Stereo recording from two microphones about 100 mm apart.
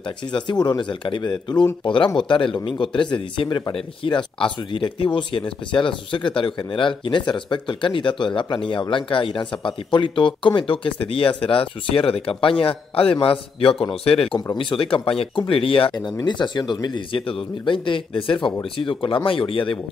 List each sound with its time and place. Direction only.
0.3 s speech: 45° left (ahead or behind)
3.1 s speech: 45° left (ahead or behind)
4.0 s a man's voice: 55° left (ahead or behind); by 14.4 s 75° left (ahead or behind)
14.6 s speech: 60° left (ahead or behind)
16.3 s speech: 50° left (ahead or behind)